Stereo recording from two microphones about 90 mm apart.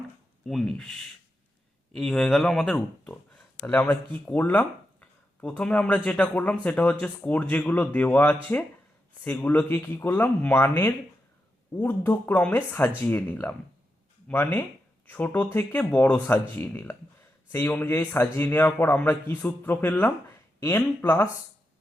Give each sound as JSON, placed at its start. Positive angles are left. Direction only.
{"t": 0.4, "sound": "a man's voice", "side_deg": 5}